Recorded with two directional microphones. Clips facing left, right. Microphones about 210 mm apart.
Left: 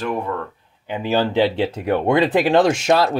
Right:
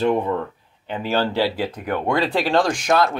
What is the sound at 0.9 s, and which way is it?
Speech, 15° left (ahead or behind).